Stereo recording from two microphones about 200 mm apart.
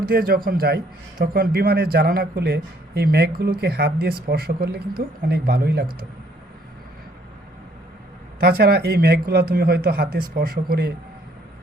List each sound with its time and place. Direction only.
0.0 s a man's voice: 50° right (ahead or behind)
8.4 s a man's voice: 50° right (ahead or behind)